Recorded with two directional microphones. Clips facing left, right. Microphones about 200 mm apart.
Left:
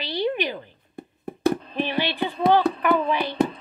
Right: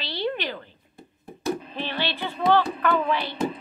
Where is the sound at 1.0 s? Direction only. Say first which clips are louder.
Left 14 dB; 60° left (ahead or behind).